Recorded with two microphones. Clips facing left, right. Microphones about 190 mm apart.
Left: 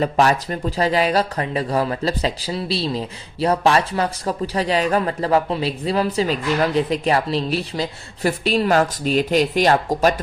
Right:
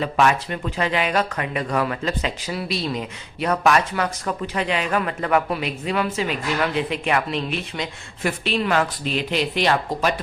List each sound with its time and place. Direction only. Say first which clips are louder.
0.0 s speech: left 2 dB; 35° left (ahead or behind)